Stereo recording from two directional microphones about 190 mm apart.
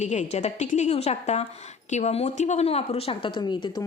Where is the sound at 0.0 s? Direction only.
40° left (ahead or behind).